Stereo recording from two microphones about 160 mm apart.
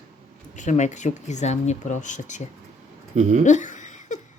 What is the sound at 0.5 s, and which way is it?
Speech, 50° left (ahead or behind).